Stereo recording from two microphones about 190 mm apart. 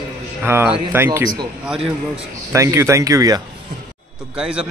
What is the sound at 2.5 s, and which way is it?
Speech, 15° right (ahead or behind).